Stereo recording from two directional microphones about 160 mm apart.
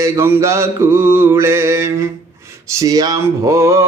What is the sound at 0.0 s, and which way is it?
Mantra, 15° right (ahead or behind).